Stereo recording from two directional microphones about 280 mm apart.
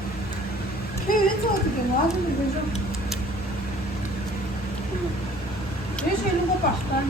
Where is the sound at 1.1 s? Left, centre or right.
Left.